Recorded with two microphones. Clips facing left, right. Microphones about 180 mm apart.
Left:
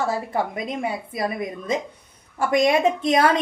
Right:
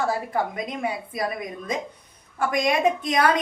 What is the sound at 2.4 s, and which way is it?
Speech, 25° left (ahead or behind).